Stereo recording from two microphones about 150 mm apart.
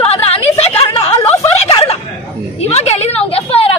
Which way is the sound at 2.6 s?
45° left (ahead or behind).